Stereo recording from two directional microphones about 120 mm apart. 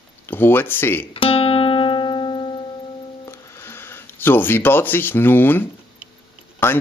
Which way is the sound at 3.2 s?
20° left (ahead or behind).